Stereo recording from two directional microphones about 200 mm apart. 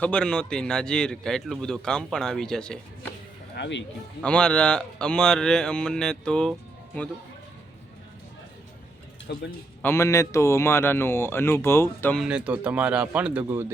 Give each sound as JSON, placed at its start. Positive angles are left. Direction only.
{"t": 0.0, "sound": "a man's voice", "side_deg": 5}
{"t": 3.5, "sound": "speech", "side_deg": 60}
{"t": 4.2, "sound": "a man's voice", "side_deg": 5}
{"t": 9.3, "sound": "speech", "side_deg": 60}
{"t": 9.8, "sound": "speech", "side_deg": 15}
{"t": 12.2, "sound": "speech", "side_deg": -5}